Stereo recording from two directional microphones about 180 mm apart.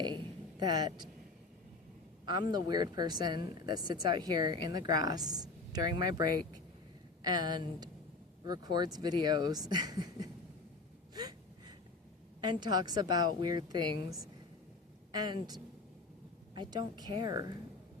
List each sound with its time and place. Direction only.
0.6 s speech: 20° right (ahead or behind)
2.2 s speech: 25° right (ahead or behind)
7.3 s speech: 25° right (ahead or behind)
11.1 s gasp: 20° right (ahead or behind)
12.4 s speech: 25° right (ahead or behind)
15.1 s speech: 20° right (ahead or behind)